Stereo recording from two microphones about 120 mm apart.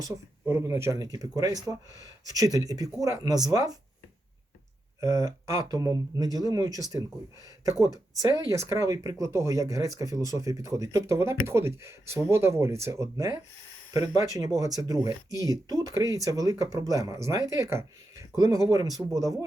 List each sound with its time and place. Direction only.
0.4 s speech: 25° right (ahead or behind)
2.3 s speech: 30° right (ahead or behind)
4.9 s speech: 25° right (ahead or behind)
8.3 s speech: 25° right (ahead or behind)